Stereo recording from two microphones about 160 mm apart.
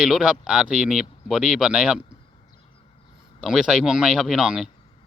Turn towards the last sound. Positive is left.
turn(degrees=-5)  # may be behind; listen again after turning